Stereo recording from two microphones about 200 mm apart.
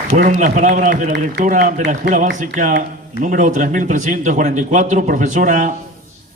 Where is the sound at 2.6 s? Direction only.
40° right (ahead or behind).